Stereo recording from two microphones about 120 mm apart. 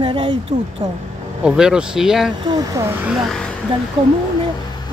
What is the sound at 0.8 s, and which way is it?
Speech, 35° right (ahead or behind).